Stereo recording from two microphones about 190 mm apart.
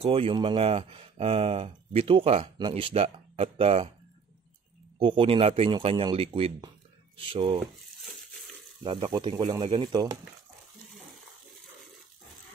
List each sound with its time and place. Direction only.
0.0 s speech: 30° right (ahead or behind)
4.9 s a man's voice: 25° right (ahead or behind)
8.0 s a sound: centre (ahead or behind)
8.8 s a man's voice: 25° right (ahead or behind)